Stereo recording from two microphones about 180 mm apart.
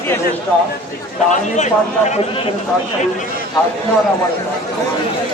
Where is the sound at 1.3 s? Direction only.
40° left (ahead or behind).